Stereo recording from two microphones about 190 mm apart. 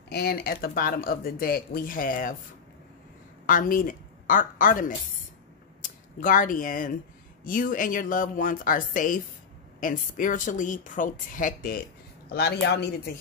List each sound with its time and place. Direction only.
0.1 s speech: 55° left (ahead or behind)
3.4 s a woman's voice: 45° left (ahead or behind)
12.3 s speech: 60° left (ahead or behind)